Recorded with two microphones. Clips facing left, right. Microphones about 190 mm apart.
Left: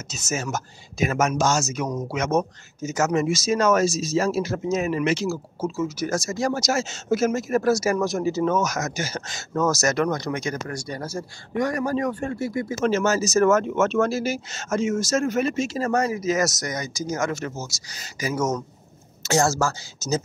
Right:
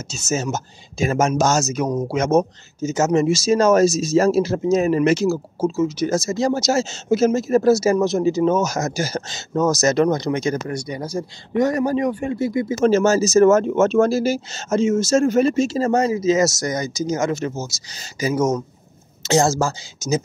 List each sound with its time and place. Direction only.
0.1 s speech: 25° right (ahead or behind)
1.4 s speech: 40° right (ahead or behind)
5.8 s speech: 20° right (ahead or behind)
9.3 s speech: 20° right (ahead or behind)
12.8 s speech: 30° right (ahead or behind); by 20.2 s 15° right (ahead or behind)